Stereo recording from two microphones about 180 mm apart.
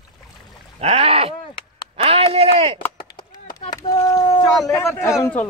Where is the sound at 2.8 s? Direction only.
25° left (ahead or behind).